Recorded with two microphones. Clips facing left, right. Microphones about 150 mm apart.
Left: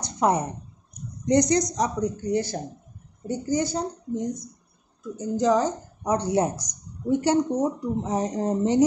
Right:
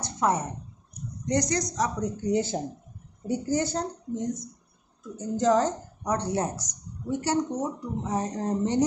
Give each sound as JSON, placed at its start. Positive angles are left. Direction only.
{"t": 0.0, "sound": "a sound", "side_deg": 15}
{"t": 1.2, "sound": "speech", "side_deg": 20}
{"t": 2.1, "sound": "speech", "side_deg": -20}
{"t": 3.3, "sound": "speech", "side_deg": -5}